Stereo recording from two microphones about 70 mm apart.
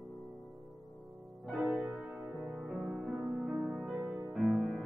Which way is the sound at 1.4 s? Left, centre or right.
Centre.